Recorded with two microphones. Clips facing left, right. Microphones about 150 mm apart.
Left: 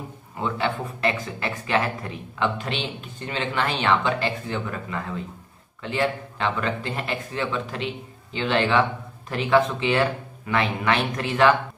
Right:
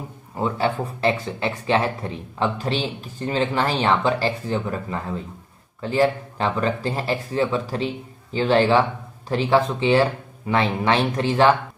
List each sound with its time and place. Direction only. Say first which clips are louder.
0.4 s speech: right 3 dB; 40° right (ahead or behind)